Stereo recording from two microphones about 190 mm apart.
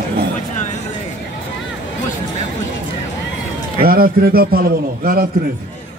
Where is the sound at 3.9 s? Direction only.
50° right (ahead or behind).